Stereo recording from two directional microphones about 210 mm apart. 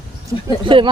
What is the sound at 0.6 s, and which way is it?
Speech, 25° right (ahead or behind).